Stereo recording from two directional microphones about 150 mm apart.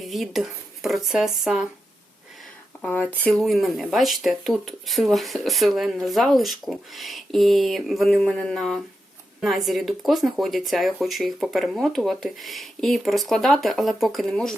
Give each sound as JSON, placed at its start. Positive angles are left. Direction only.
{"t": 0.0, "sound": "speech", "side_deg": 0}
{"t": 2.8, "sound": "speech", "side_deg": 10}